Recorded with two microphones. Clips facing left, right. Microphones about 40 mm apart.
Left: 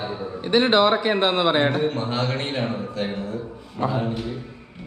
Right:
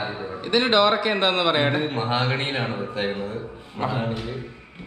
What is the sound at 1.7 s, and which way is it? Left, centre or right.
Speech, right.